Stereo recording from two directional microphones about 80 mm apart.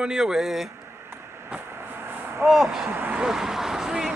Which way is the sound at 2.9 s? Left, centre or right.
Right.